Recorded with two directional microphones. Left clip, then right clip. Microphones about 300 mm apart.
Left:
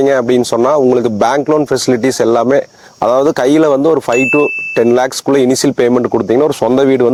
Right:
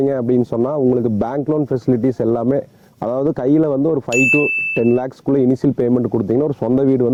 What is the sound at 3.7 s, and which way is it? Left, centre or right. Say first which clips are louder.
Speech: left 7 dB; left.